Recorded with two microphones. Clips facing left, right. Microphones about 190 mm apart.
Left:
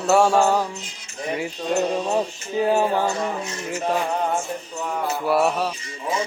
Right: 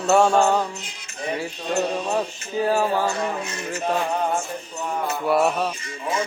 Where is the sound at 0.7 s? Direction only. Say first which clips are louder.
Even; 60° right (ahead or behind).